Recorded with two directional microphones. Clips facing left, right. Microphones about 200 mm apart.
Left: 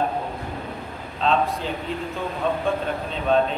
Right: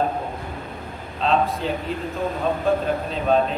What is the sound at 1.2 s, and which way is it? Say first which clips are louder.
A man's voice: right 1 dB; centre (ahead or behind).